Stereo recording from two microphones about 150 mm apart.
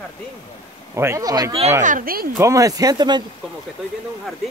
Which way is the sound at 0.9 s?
15° right (ahead or behind).